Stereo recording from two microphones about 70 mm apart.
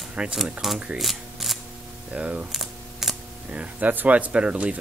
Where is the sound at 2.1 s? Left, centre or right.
Centre.